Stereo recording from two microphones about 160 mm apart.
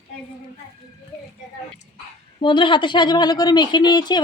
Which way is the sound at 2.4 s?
30° left (ahead or behind).